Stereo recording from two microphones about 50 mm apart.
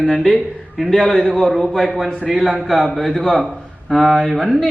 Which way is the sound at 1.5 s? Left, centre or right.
Centre.